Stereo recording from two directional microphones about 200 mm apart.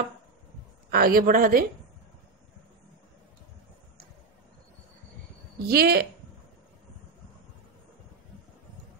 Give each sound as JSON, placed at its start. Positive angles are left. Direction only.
{"t": 0.8, "sound": "a woman's voice", "side_deg": -50}
{"t": 5.7, "sound": "a woman's voice", "side_deg": -50}